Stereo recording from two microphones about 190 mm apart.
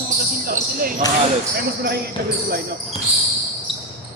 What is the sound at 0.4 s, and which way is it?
Basketball bounce, 50° right (ahead or behind).